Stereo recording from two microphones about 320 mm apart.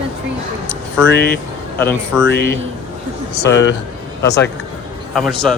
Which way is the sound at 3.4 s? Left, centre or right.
Left.